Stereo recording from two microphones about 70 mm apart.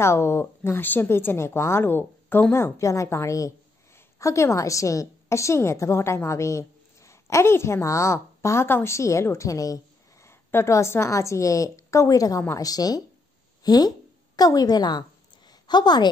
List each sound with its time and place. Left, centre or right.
0.0 s a woman's voice: left
2.5 s a woman's voice: left
10.2 s a woman's voice: left